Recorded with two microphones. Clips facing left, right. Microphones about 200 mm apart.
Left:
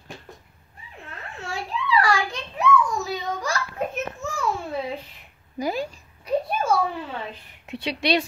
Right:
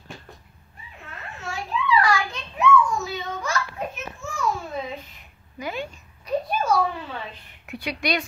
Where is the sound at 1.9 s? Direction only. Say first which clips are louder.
Even; 35° left (ahead or behind).